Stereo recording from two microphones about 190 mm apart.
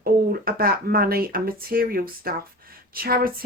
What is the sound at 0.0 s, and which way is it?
Speech, 50° right (ahead or behind).